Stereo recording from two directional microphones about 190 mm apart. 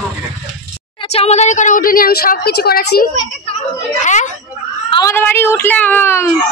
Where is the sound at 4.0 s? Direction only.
40° left (ahead or behind).